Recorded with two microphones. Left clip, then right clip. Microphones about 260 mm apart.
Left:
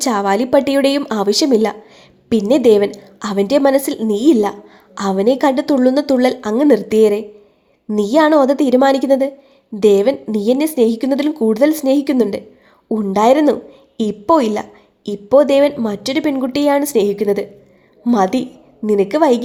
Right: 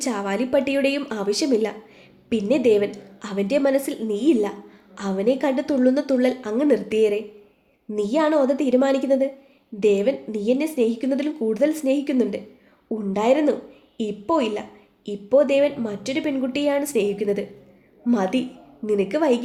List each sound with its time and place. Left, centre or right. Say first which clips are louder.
0.0 s a woman's voice: left 9 dB; left